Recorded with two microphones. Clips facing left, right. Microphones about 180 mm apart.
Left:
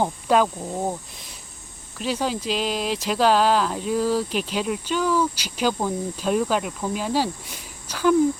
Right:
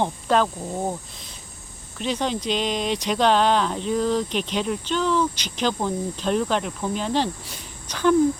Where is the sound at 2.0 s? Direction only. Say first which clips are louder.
Even; 5° left (ahead or behind).